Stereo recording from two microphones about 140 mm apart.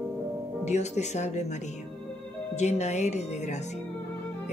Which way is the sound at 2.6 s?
55° left (ahead or behind).